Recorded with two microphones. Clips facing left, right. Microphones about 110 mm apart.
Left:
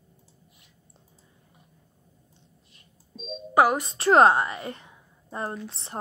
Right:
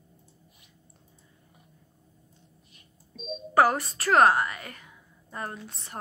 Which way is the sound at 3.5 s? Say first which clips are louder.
Left 1 dB; 15° left (ahead or behind).